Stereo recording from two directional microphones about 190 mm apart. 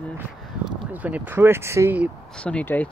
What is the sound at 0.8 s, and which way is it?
Speech, 10° right (ahead or behind).